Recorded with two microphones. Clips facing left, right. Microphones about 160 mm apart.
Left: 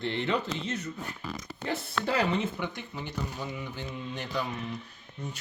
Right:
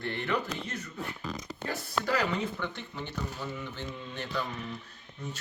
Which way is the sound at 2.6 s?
10° left (ahead or behind).